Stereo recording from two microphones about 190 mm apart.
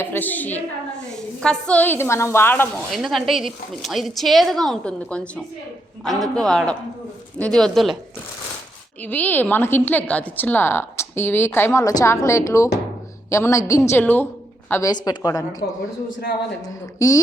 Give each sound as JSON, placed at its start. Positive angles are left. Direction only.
{"t": 0.0, "sound": "a woman's voice", "side_deg": 10}
{"t": 2.9, "sound": "a woman's voice", "side_deg": 0}
{"t": 9.0, "sound": "a woman's voice", "side_deg": 10}